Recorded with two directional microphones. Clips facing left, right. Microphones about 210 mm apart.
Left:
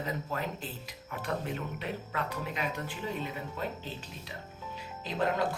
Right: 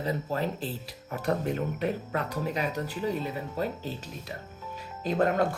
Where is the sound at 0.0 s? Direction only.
35° right (ahead or behind).